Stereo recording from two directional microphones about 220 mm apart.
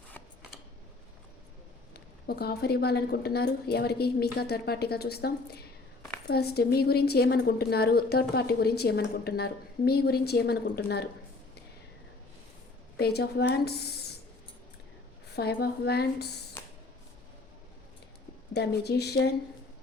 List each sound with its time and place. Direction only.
1.9 s a woman's voice: 45° left (ahead or behind)
13.0 s a woman's voice: 45° left (ahead or behind)
15.4 s a woman's voice: 45° left (ahead or behind)
16.6 s a sound: 10° left (ahead or behind)
18.5 s a woman's voice: 50° left (ahead or behind)